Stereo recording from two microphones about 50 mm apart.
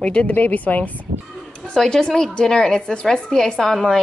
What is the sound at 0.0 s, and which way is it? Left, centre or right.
Speech, left.